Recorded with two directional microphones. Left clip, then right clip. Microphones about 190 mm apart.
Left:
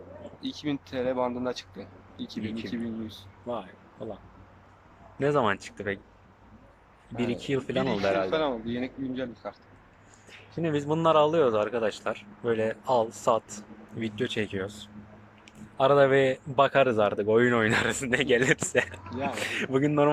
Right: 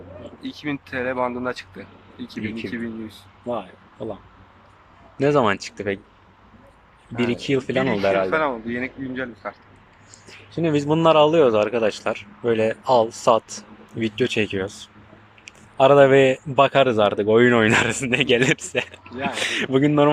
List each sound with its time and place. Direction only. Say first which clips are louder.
0.4 s speech: right 3 dB; 15° left (ahead or behind)
2.4 s speech: right 7 dB; 5° right (ahead or behind)
2.6 s speech: right 5 dB; 15° left (ahead or behind)
3.4 s speech: right 7 dB; 5° right (ahead or behind)
5.2 s speech: right 7 dB; 5° right (ahead or behind)
7.2 s speech: right 7 dB; centre (ahead or behind)
8.3 s speech: right 6 dB; 20° left (ahead or behind)
10.6 s speech: right 8 dB; 5° right (ahead or behind)